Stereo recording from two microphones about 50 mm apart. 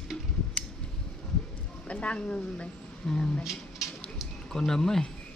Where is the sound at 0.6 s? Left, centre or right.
Left.